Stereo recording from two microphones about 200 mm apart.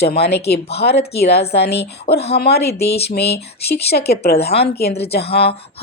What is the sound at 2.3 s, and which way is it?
Speech, 50° left (ahead or behind).